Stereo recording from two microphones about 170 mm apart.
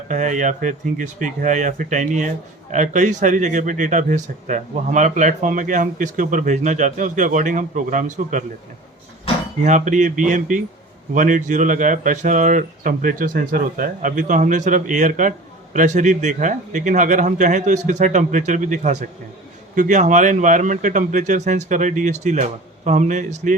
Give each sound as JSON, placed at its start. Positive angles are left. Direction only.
{"t": 0.1, "sound": "speech", "side_deg": -45}
{"t": 9.6, "sound": "speech", "side_deg": -45}